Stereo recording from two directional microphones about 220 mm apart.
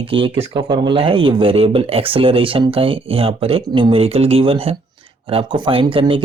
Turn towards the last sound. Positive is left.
turn(degrees=-25)  # may be behind; listen again after turning